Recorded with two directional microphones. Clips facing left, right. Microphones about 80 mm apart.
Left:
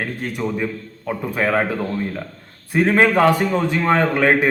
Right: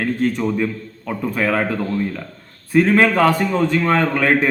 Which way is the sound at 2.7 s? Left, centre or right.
Left.